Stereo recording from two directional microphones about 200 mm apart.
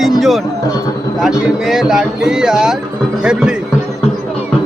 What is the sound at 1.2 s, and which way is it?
Speech, centre (ahead or behind).